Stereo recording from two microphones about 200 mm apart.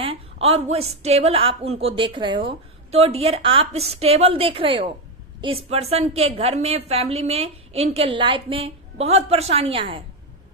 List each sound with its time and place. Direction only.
0.0 s a woman's voice: 30° right (ahead or behind)